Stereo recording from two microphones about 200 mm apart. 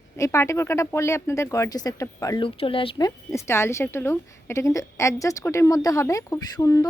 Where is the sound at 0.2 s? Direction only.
15° left (ahead or behind).